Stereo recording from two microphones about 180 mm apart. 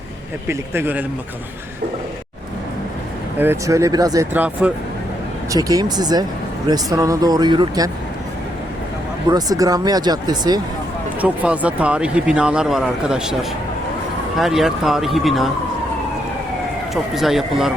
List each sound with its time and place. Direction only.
0.4 s speech: 15° right (ahead or behind)
3.3 s speech: 10° right (ahead or behind)
4.4 s speech: 5° right (ahead or behind)
5.5 s speech: 20° right (ahead or behind)
9.3 s speech: 20° right (ahead or behind)
11.2 s speech: 10° right (ahead or behind)
14.3 s speech: centre (ahead or behind)
16.9 s speech: centre (ahead or behind)